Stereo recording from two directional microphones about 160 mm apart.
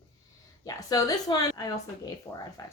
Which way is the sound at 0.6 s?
20° left (ahead or behind).